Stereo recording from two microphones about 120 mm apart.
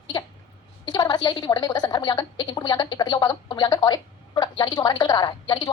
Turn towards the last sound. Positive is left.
turn(degrees=35)  # may be behind; listen again after turning